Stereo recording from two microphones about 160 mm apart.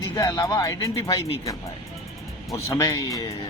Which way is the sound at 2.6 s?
20° left (ahead or behind).